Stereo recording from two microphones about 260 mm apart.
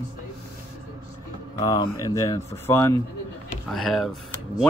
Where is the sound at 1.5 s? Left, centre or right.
Centre.